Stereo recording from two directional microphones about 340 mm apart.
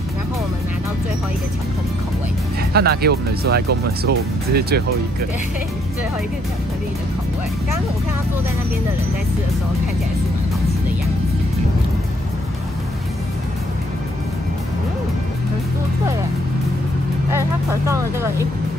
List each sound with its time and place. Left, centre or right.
2.7 s speech: right
17.3 s speech: centre